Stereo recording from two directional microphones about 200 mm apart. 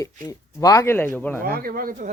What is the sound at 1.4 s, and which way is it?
Speech, 45° right (ahead or behind).